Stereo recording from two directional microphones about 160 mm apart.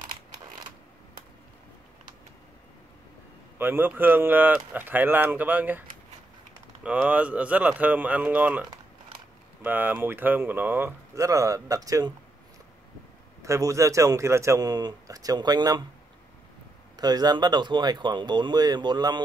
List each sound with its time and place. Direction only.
3.5 s speech: 15° right (ahead or behind)
13.4 s a man's voice: 20° right (ahead or behind)
16.9 s a man's voice: 25° right (ahead or behind)